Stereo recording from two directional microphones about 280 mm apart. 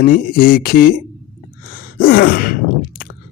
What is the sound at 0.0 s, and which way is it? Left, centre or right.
A man's voice, left.